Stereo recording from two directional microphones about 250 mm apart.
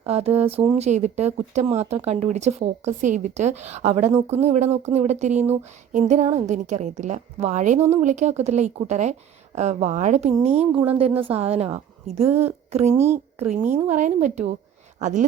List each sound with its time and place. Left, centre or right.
0.0 s a woman's voice: right